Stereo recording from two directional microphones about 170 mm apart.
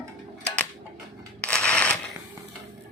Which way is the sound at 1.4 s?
5° left (ahead or behind).